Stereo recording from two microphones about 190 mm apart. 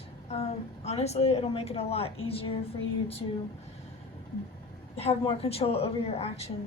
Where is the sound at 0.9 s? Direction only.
35° left (ahead or behind).